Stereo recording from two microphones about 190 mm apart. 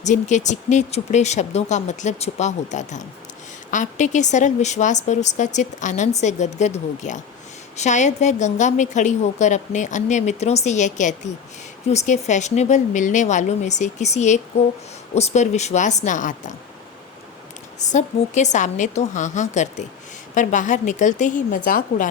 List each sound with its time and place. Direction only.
0.0 s speech: 40° left (ahead or behind)
17.7 s speech: 40° left (ahead or behind)